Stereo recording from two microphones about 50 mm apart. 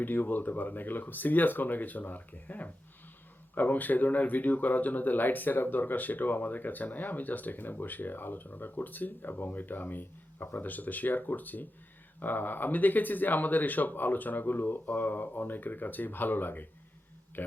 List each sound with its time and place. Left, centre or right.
0.0 s speech: left